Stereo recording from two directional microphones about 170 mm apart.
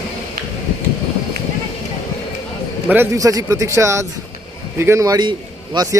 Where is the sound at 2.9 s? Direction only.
15° right (ahead or behind).